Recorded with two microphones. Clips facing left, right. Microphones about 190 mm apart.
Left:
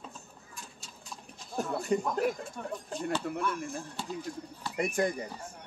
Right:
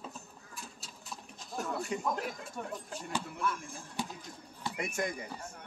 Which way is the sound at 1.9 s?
50° left (ahead or behind).